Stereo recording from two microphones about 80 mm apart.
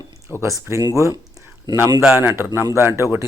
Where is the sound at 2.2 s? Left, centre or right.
Right.